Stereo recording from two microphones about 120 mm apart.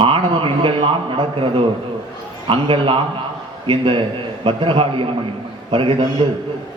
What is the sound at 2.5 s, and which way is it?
A man's voice, 45° right (ahead or behind).